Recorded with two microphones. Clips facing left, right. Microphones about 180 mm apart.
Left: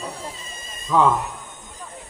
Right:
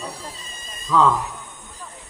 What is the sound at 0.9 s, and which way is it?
Speech, 20° left (ahead or behind).